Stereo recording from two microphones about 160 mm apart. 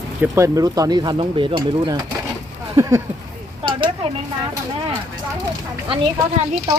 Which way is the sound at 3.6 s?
30° right (ahead or behind).